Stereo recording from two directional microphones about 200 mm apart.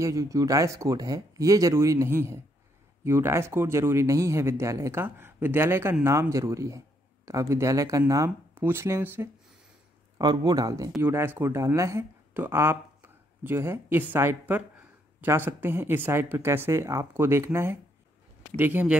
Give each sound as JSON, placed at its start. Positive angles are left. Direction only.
{"t": 0.0, "sound": "a man's voice", "side_deg": -15}